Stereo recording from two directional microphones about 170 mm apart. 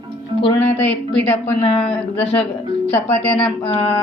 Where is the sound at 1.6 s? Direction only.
40° left (ahead or behind).